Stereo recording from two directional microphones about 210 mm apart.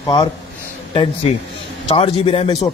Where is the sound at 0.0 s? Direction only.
20° left (ahead or behind).